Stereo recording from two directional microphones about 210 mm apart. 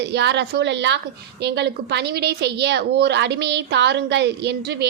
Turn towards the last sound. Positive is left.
turn(degrees=-50)  # may be behind; listen again after turning